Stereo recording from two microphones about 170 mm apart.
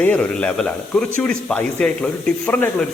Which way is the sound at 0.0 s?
10° left (ahead or behind).